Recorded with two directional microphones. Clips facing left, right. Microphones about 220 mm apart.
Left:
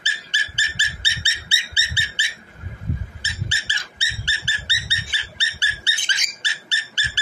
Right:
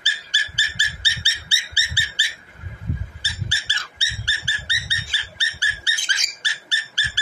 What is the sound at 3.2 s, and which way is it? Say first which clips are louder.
Dog: left 1 dB; 20° left (ahead or behind).